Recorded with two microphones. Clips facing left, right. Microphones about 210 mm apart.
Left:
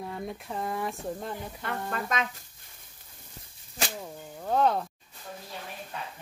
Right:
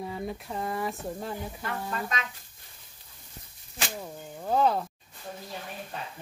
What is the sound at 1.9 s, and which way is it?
Speech, 50° left (ahead or behind).